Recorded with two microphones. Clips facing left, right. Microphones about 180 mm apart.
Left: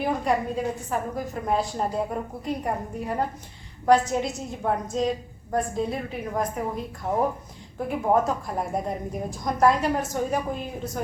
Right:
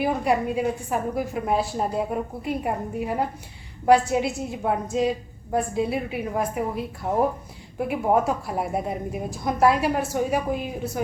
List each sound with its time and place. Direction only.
0.0 s a woman's voice: 10° right (ahead or behind)